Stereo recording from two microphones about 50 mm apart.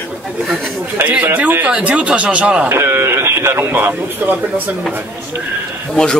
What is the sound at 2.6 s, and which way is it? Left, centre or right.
Speech, right.